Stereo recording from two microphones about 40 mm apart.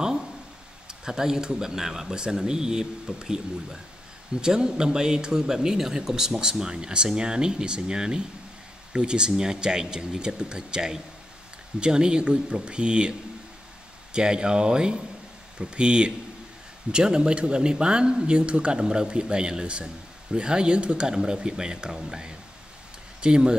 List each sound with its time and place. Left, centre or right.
0.8 s speech: centre
4.4 s speech: centre
14.1 s speech: right